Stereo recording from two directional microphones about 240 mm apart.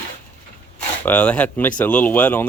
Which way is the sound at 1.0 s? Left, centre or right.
Centre.